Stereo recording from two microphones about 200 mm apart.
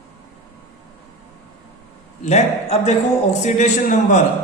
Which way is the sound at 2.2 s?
35° left (ahead or behind).